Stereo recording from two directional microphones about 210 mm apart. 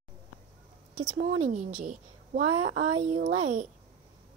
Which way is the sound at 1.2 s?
35° right (ahead or behind).